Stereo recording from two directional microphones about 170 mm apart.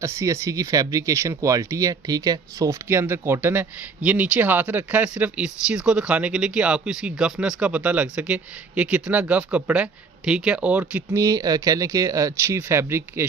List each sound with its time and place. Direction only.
0.0 s speech: 15° right (ahead or behind)
11.2 s speech: 20° right (ahead or behind)